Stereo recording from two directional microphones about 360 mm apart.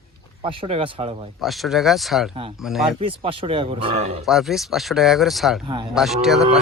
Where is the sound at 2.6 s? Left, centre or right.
Centre.